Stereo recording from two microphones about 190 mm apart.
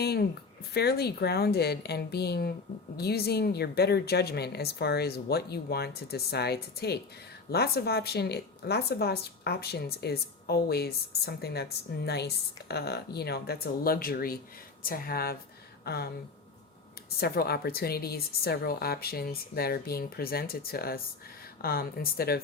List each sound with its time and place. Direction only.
0.0 s a woman's voice: 55° left (ahead or behind)
17.2 s a woman's voice: 55° left (ahead or behind)